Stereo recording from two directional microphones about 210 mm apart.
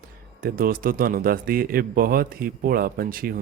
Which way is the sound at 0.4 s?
40° right (ahead or behind).